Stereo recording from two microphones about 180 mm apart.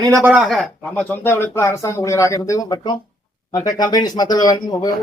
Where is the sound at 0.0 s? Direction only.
15° right (ahead or behind).